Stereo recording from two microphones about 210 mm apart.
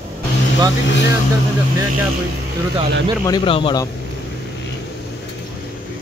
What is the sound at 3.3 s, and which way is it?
Speech, 25° left (ahead or behind).